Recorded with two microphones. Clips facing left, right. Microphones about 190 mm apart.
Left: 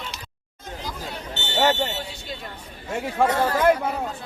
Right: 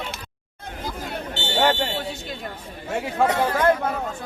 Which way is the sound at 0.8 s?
55° right (ahead or behind).